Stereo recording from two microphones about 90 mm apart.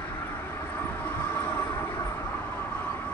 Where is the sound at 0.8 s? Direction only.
25° left (ahead or behind).